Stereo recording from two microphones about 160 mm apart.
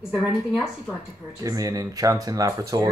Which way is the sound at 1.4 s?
20° right (ahead or behind).